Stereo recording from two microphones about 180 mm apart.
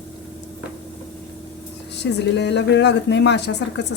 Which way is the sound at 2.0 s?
75° left (ahead or behind).